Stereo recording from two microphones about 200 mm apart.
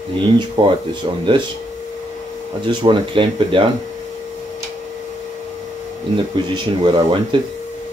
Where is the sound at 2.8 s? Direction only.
25° right (ahead or behind).